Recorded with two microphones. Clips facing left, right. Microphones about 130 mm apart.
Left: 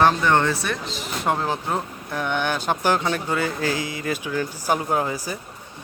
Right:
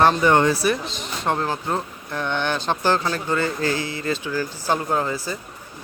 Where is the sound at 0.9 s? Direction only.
5° left (ahead or behind).